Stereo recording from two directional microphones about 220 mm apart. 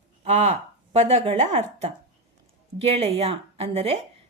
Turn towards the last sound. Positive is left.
turn(degrees=-25)  # may be behind; listen again after turning